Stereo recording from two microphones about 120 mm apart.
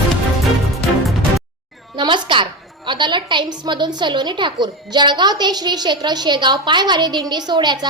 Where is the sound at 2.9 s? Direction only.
40° right (ahead or behind).